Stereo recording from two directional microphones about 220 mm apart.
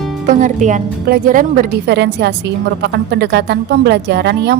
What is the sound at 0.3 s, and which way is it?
A woman's voice, 35° right (ahead or behind).